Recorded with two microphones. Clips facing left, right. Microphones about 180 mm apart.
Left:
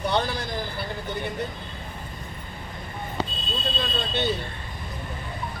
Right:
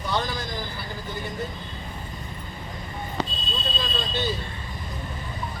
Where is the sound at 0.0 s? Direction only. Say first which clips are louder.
Left 2 dB; 60° left (ahead or behind).